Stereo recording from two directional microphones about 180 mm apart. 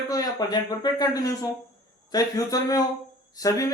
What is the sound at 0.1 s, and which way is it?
A man's voice, 20° left (ahead or behind).